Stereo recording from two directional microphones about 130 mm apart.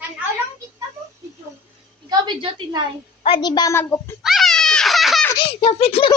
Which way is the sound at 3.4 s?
35° left (ahead or behind).